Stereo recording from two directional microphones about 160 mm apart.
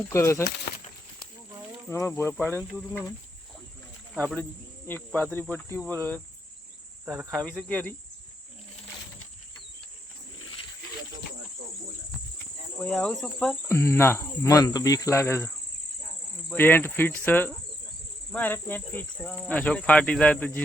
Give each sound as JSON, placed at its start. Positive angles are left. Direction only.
{"t": 0.1, "sound": "speech", "side_deg": 20}
{"t": 1.9, "sound": "speech", "side_deg": 15}
{"t": 4.1, "sound": "speech", "side_deg": 0}
{"t": 7.0, "sound": "cricket", "side_deg": -10}
{"t": 7.3, "sound": "speech", "side_deg": 5}
{"t": 12.8, "sound": "cricket", "side_deg": 5}
{"t": 13.7, "sound": "speech", "side_deg": 15}
{"t": 16.5, "sound": "speech", "side_deg": 10}